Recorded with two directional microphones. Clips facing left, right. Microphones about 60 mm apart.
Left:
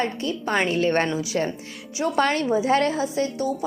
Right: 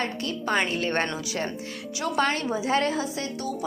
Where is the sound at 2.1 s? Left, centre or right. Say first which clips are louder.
Left 4 dB; left.